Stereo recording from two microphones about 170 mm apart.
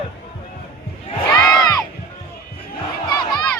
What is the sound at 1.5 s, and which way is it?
Music, 20° left (ahead or behind).